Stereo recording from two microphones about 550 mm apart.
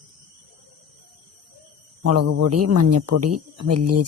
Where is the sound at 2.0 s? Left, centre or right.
Right.